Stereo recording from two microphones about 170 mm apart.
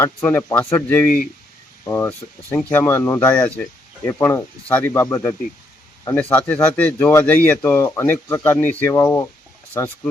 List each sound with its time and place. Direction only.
0.0 s speech: 10° left (ahead or behind)